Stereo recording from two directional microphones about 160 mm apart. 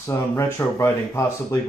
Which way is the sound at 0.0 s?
15° left (ahead or behind).